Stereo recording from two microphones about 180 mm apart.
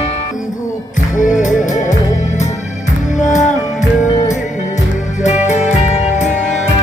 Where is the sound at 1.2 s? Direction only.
45° left (ahead or behind).